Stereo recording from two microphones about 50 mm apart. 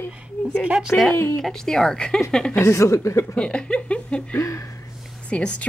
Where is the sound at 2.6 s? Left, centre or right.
Left.